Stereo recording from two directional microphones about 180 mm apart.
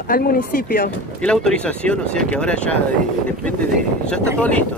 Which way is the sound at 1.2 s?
5° left (ahead or behind).